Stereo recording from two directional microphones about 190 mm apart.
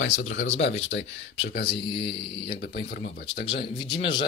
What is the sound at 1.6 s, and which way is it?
Speech, 25° left (ahead or behind).